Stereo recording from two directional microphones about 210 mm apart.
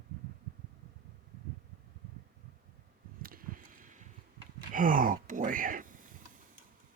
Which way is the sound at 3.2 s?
45° right (ahead or behind).